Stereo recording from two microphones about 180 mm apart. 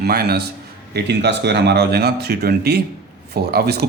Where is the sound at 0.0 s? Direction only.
60° right (ahead or behind).